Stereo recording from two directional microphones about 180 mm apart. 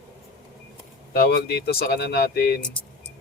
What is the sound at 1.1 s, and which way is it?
Speech, 60° left (ahead or behind).